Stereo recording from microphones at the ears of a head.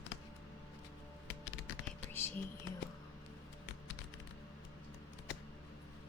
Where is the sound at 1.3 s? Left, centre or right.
Left.